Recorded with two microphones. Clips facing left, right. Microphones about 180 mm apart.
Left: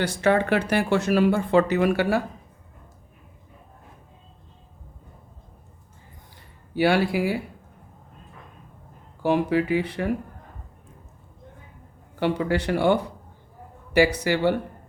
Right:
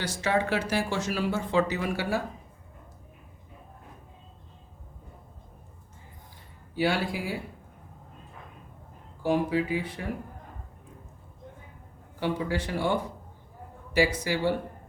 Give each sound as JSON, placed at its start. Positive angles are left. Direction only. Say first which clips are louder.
{"t": 0.0, "sound": "speech", "louder": "left 6 dB", "side_deg": 60}
{"t": 6.7, "sound": "speech", "louder": "left 7 dB", "side_deg": 70}
{"t": 9.2, "sound": "speech", "louder": "left 4 dB", "side_deg": 70}
{"t": 12.2, "sound": "speech", "louder": "left 6 dB", "side_deg": 70}